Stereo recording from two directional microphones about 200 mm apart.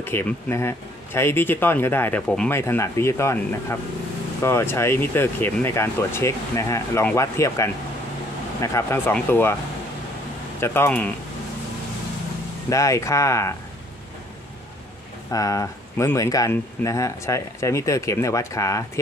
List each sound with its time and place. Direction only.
0.0 s speech: 10° left (ahead or behind)
4.4 s speech: 10° left (ahead or behind)
10.6 s speech: 10° left (ahead or behind)
12.6 s speech: 15° left (ahead or behind)
15.3 s speech: 15° left (ahead or behind)